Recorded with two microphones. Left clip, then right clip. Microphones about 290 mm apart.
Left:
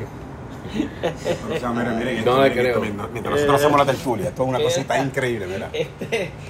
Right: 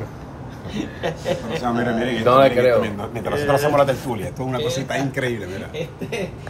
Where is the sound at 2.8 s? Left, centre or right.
Centre.